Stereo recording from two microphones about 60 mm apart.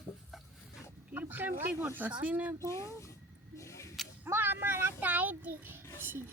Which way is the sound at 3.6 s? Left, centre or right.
Left.